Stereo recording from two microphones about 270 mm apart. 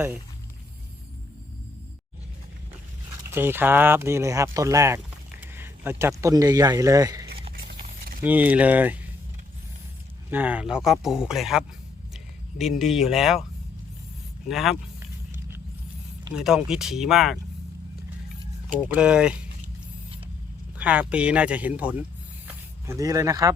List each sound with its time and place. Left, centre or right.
3.3 s speech: centre
7.5 s a sound: right
8.2 s speech: centre
10.2 s speech: centre
12.1 s a sound: centre
12.8 s speech: centre
14.4 s speech: centre
15.3 s a sound: centre
16.3 s speech: centre
18.9 s speech: centre
20.7 s speech: centre